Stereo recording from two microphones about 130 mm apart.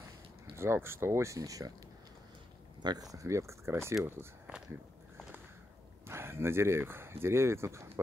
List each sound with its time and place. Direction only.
0.6 s speech: 20° right (ahead or behind)
2.8 s speech: 30° right (ahead or behind)
4.5 s a sound: 10° right (ahead or behind)
6.0 s speech: 20° right (ahead or behind)